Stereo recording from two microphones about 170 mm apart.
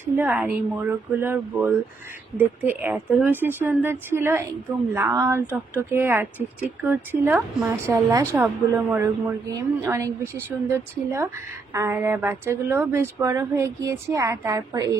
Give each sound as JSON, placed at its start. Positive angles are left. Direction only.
{"t": 0.0, "sound": "speech", "side_deg": -10}